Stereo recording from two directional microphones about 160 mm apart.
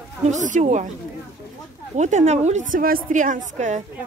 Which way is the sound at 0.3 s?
50° right (ahead or behind).